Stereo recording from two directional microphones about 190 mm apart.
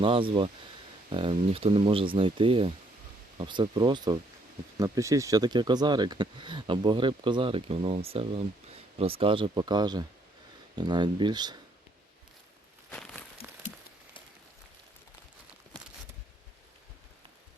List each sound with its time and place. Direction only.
0.0 s speech: 25° right (ahead or behind)
12.9 s crumpling: 5° left (ahead or behind)